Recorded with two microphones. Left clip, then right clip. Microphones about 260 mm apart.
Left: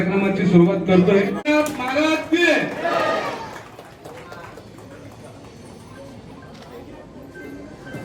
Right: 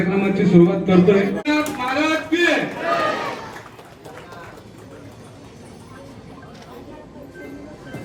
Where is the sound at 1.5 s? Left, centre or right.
Centre.